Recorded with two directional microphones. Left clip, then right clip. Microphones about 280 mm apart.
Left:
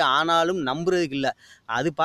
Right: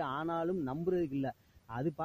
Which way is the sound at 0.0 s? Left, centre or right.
Centre.